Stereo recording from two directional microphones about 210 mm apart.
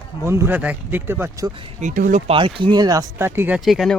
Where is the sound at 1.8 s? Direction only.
40° right (ahead or behind).